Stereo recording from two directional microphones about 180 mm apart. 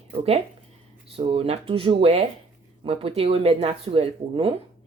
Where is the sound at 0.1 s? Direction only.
30° right (ahead or behind).